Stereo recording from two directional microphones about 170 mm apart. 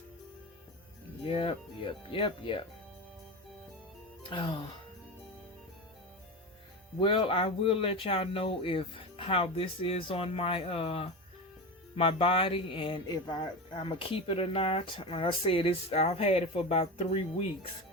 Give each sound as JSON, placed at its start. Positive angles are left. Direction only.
{"t": 1.2, "sound": "speech", "side_deg": 30}
{"t": 4.2, "sound": "speech", "side_deg": 30}
{"t": 7.0, "sound": "speech", "side_deg": 30}